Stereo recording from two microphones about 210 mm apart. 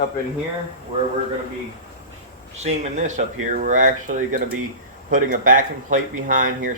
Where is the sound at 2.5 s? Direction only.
30° right (ahead or behind).